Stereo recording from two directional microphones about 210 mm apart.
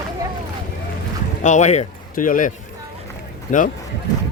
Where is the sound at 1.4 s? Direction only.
35° left (ahead or behind).